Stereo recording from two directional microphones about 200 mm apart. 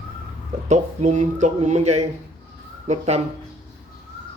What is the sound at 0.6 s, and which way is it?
Speech, 35° right (ahead or behind).